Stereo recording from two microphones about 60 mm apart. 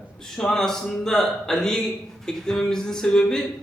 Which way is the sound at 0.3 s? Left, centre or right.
Centre.